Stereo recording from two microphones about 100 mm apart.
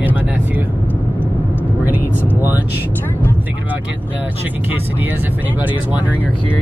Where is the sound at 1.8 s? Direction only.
20° right (ahead or behind).